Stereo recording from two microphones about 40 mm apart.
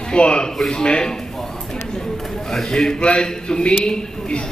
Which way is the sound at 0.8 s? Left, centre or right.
Left.